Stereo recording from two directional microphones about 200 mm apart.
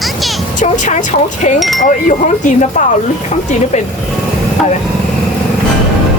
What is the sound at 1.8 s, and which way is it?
Speech, 40° left (ahead or behind).